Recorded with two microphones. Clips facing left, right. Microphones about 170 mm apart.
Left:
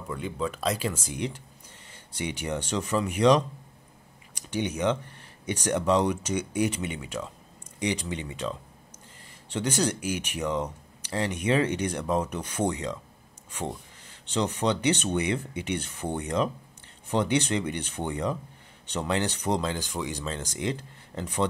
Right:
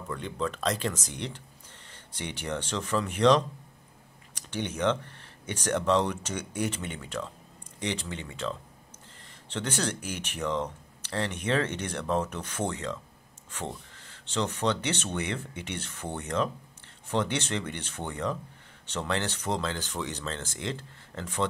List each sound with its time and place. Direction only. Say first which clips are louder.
0.1 s speech: left 1 dB; 10° left (ahead or behind)
4.5 s speech: left 2 dB; 10° left (ahead or behind)